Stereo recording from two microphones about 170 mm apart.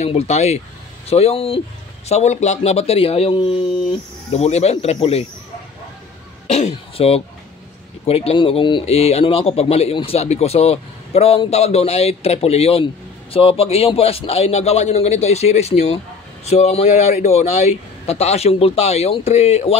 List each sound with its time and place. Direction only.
0.0 s speech: 40° left (ahead or behind)
6.4 s speech: 40° left (ahead or behind)